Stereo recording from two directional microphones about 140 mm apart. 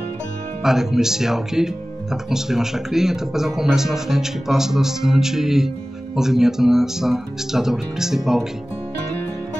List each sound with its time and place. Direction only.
0.7 s a man's voice: 5° right (ahead or behind)